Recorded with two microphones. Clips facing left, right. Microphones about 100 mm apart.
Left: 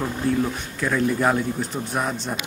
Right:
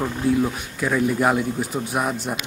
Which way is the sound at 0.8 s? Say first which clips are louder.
Right 1 dB; 5° right (ahead or behind).